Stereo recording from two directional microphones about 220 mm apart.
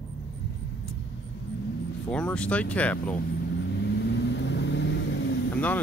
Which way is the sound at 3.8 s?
50° left (ahead or behind).